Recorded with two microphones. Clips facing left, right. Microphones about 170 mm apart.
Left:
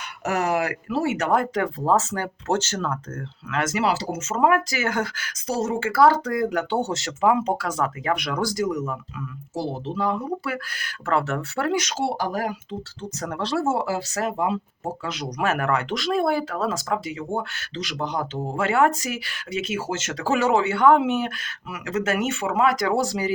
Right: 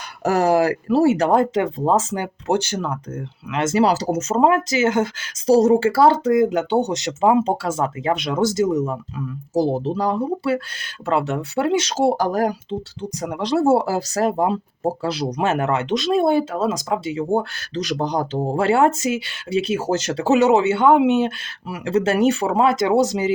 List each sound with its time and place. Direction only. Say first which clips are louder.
0.3 s speech: right 7 dB; 35° right (ahead or behind)
4.4 s speech: right 3 dB; 25° right (ahead or behind)
11.9 s speech: right 7 dB; 45° right (ahead or behind)
13.0 s speech: right 1 dB; 15° right (ahead or behind)
13.7 s speech: right 7 dB; 40° right (ahead or behind); by 17.2 s 25° right (ahead or behind)
17.3 s speech: right 7 dB; 40° right (ahead or behind)
20.2 s speech: right 5 dB; 20° right (ahead or behind)